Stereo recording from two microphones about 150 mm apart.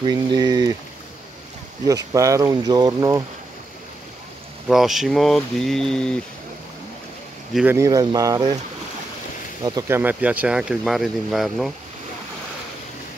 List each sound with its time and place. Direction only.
0.0 s speech: 30° right (ahead or behind)
1.9 s speech: 20° right (ahead or behind)
4.6 s speech: centre (ahead or behind)
7.6 s speech: 20° right (ahead or behind)
9.7 s speech: 20° right (ahead or behind); by 11.7 s centre (ahead or behind)